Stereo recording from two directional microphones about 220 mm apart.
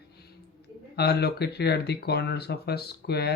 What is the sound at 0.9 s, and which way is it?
Speech, 45° left (ahead or behind).